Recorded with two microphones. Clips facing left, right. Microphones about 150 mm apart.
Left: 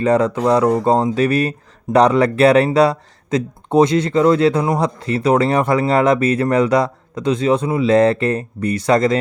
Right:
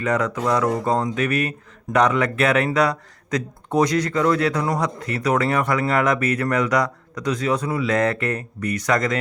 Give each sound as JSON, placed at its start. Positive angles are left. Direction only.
{"t": 0.0, "sound": "speech", "side_deg": 30}